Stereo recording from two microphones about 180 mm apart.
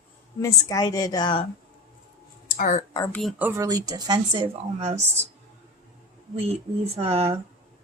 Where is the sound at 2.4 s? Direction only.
45° left (ahead or behind).